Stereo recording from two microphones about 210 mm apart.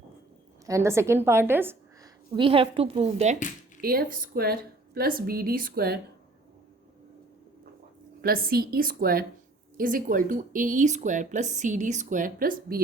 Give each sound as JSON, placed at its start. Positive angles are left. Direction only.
{"t": 0.6, "sound": "a woman's voice", "side_deg": -15}
{"t": 2.3, "sound": "a woman's voice", "side_deg": -25}
{"t": 3.8, "sound": "a woman's voice", "side_deg": -45}
{"t": 8.2, "sound": "a woman's voice", "side_deg": -45}